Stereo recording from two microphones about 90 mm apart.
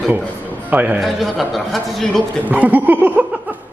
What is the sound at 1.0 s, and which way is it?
A man's voice, centre (ahead or behind).